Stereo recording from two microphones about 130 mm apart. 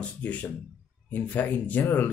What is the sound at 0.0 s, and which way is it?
Speech, 10° left (ahead or behind).